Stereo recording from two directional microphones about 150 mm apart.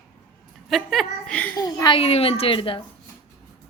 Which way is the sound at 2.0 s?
40° left (ahead or behind).